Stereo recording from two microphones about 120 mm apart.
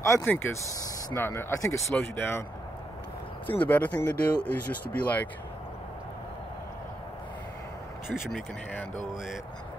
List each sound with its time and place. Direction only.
0.0 s speech: 25° left (ahead or behind)
3.4 s speech: 15° left (ahead or behind)